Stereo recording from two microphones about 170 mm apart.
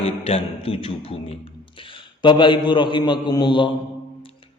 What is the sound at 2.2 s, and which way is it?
A man's voice, 30° left (ahead or behind).